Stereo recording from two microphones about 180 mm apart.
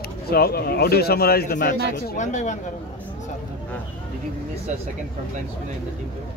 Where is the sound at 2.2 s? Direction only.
40° left (ahead or behind).